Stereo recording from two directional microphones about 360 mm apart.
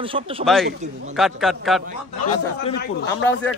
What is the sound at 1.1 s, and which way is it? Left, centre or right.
Speech, centre.